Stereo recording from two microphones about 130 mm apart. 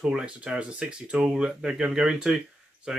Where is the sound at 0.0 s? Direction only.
10° right (ahead or behind).